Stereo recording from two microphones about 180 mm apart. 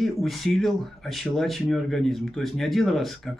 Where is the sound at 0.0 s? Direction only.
Centre (ahead or behind).